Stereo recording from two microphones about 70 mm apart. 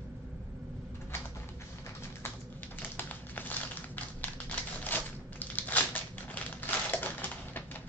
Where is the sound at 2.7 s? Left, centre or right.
Left.